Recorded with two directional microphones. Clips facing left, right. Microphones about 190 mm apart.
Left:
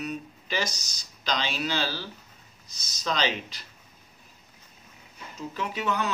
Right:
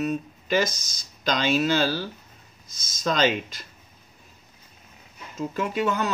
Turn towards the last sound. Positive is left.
turn(degrees=-45)  # may be behind; listen again after turning